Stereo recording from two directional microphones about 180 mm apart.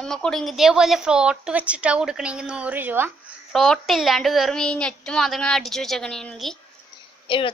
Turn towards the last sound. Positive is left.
turn(degrees=30)  # may be behind; listen again after turning